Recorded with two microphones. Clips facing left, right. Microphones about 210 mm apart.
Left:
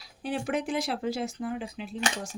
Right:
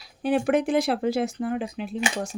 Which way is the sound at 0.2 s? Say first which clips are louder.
Right 8 dB; 60° right (ahead or behind).